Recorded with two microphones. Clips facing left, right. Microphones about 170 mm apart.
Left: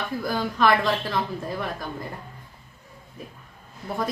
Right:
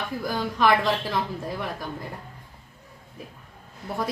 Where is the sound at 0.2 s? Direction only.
10° right (ahead or behind).